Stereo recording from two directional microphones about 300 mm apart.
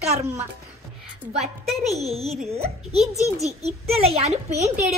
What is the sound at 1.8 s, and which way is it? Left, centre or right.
A child's voice, right.